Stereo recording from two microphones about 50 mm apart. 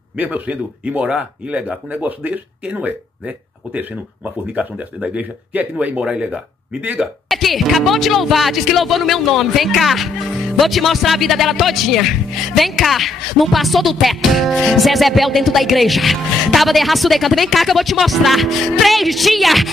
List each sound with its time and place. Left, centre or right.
0.2 s speech: right
7.2 s speech: centre